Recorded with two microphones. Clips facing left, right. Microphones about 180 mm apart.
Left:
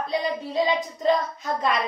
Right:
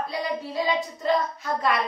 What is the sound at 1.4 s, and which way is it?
Speech, 20° left (ahead or behind).